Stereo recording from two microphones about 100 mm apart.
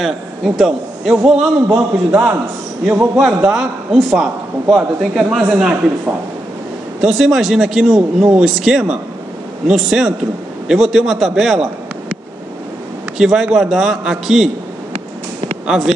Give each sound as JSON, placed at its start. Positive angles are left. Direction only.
{"t": 0.0, "sound": "a man's voice", "side_deg": 0}
{"t": 2.8, "sound": "a man's voice", "side_deg": -5}
{"t": 13.2, "sound": "a man's voice", "side_deg": -5}
{"t": 15.6, "sound": "speech", "side_deg": -5}